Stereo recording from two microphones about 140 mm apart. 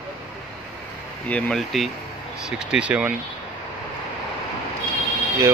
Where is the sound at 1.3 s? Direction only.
Centre (ahead or behind).